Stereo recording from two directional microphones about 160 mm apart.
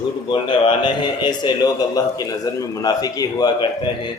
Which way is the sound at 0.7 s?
30° left (ahead or behind).